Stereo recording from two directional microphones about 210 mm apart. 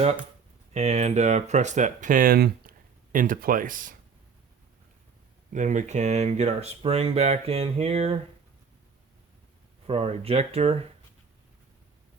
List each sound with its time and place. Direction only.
0.7 s speech: 30° right (ahead or behind)
5.5 s speech: 35° right (ahead or behind)
9.8 s speech: 25° right (ahead or behind)